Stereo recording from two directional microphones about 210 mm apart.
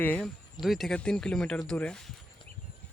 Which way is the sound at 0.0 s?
10° left (ahead or behind).